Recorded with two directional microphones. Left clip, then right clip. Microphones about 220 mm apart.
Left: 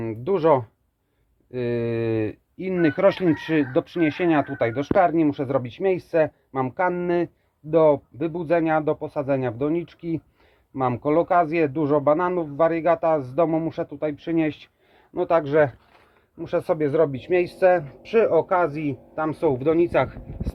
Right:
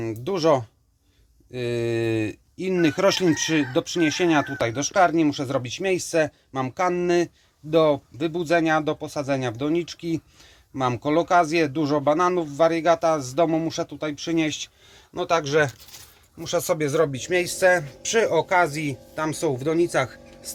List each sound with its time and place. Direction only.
0.0 s speech: 5° right (ahead or behind)